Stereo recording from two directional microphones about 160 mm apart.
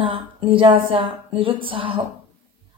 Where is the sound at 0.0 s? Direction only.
35° right (ahead or behind).